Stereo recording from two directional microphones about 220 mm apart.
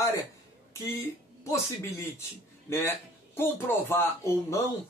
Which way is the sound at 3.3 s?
10° left (ahead or behind).